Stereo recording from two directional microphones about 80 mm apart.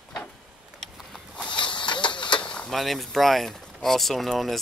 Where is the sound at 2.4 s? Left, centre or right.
Centre.